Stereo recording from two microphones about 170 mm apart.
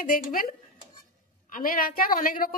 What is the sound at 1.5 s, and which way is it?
A woman's voice, 55° left (ahead or behind).